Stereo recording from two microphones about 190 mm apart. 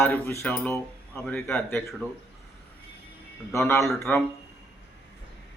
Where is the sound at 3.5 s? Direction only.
15° left (ahead or behind).